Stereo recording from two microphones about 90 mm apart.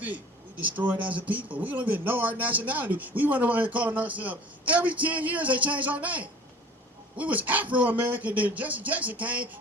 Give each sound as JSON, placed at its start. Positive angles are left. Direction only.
{"t": 0.6, "sound": "speech", "side_deg": -15}